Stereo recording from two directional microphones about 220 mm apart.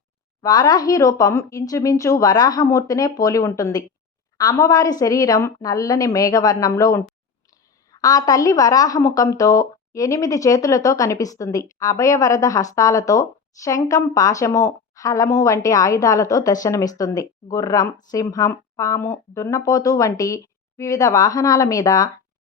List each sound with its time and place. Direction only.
0.4 s a woman's voice: 15° left (ahead or behind)